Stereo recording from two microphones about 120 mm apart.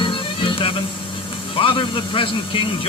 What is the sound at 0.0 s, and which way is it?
Music, 45° left (ahead or behind).